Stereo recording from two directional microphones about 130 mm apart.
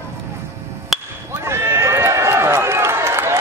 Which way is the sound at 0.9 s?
Centre (ahead or behind).